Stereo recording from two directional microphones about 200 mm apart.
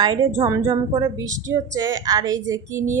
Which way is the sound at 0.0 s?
20° right (ahead or behind).